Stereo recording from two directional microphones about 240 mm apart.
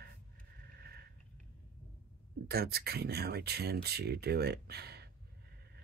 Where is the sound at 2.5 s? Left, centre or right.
Right.